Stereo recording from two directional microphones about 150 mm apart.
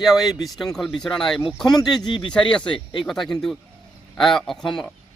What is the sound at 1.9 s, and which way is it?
Speech, 30° left (ahead or behind).